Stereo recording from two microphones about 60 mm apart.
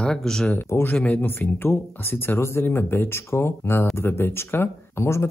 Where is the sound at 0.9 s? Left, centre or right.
Left.